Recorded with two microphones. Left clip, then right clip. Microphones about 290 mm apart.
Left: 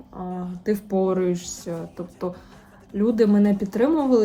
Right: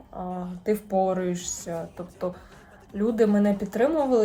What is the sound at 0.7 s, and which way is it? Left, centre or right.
Speech, centre.